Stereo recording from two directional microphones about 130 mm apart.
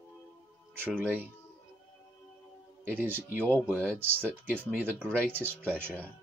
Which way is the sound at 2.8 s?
15° right (ahead or behind).